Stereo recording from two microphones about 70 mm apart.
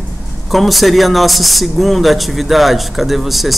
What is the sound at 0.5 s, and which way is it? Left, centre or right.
Speech, centre.